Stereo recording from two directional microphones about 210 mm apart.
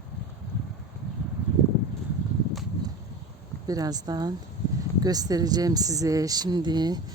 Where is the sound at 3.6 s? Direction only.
15° right (ahead or behind).